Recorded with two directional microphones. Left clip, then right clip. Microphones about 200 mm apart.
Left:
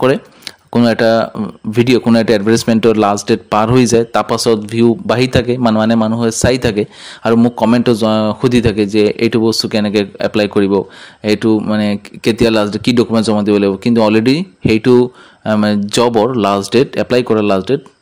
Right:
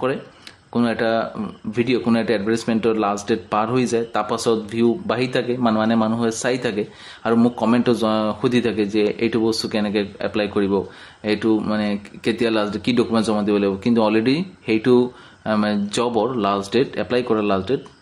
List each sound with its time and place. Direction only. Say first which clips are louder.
0.7 s speech: left 9 dB; 45° left (ahead or behind)